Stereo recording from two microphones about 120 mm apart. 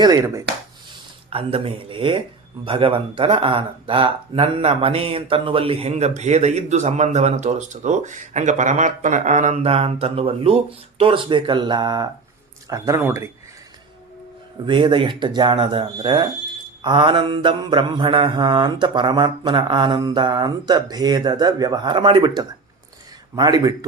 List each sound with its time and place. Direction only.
0.0 s speech: 30° right (ahead or behind)
1.3 s speech: 50° right (ahead or behind)
12.6 s speech: 25° right (ahead or behind)
14.6 s mantra: 40° right (ahead or behind)